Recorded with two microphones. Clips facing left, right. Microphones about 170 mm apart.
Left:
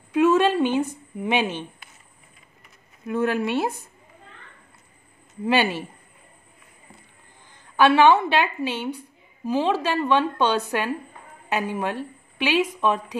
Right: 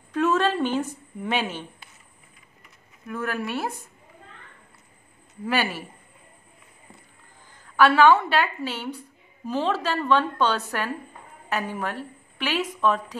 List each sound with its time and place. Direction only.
0.1 s a woman's voice: 10° left (ahead or behind)
3.1 s a woman's voice: 25° left (ahead or behind)
5.4 s a woman's voice: 25° left (ahead or behind)
7.7 s a woman's voice: 20° left (ahead or behind)